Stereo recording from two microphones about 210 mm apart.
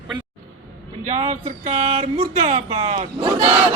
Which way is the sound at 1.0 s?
35° right (ahead or behind).